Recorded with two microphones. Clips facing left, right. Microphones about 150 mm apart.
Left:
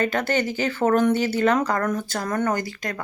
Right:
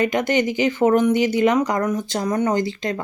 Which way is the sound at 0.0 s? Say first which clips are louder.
Right 3 dB; 15° right (ahead or behind).